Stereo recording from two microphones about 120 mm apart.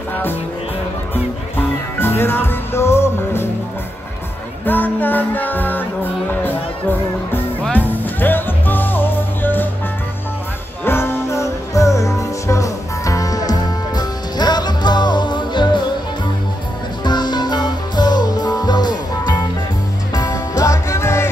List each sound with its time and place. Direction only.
1.1 s music: 15° left (ahead or behind)
4.6 s music: 15° left (ahead or behind)
7.7 s music: 15° left (ahead or behind)
10.9 s music: 20° left (ahead or behind); by 15.8 s 40° left (ahead or behind)
17.0 s music: 35° left (ahead or behind)